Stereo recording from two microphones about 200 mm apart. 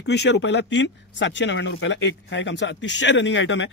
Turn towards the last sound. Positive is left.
turn(degrees=65)  # may be behind; listen again after turning